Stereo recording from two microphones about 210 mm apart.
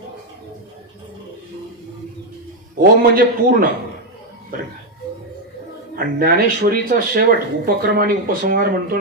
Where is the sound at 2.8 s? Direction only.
45° right (ahead or behind).